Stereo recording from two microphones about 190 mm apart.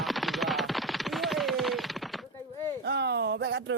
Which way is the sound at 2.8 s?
60° right (ahead or behind).